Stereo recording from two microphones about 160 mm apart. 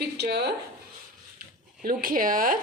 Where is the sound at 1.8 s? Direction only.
60° right (ahead or behind).